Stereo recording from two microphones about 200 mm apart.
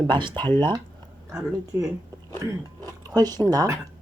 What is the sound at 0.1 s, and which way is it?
Speech, 25° right (ahead or behind).